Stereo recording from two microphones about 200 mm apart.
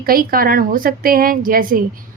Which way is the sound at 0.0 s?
45° right (ahead or behind).